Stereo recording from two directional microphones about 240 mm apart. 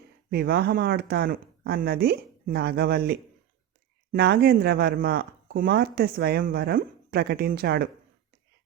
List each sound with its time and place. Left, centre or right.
0.3 s speech: right